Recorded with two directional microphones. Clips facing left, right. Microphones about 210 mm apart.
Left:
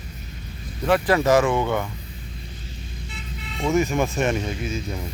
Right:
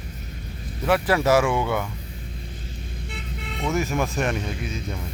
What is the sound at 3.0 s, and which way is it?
Vehicle, 60° right (ahead or behind).